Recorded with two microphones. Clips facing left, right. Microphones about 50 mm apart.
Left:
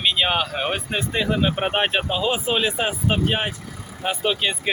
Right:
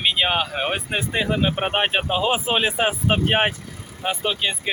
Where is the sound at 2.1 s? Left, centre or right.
Right.